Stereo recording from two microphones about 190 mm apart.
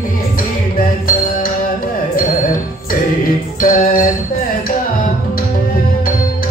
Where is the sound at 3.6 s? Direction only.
50° left (ahead or behind).